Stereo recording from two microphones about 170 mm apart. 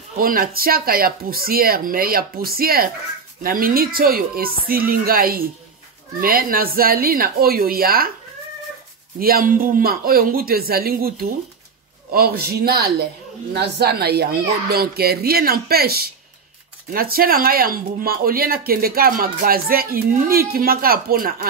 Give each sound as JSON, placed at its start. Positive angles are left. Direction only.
{"t": 0.2, "sound": "speech", "side_deg": -60}
{"t": 9.2, "sound": "a child's voice", "side_deg": -55}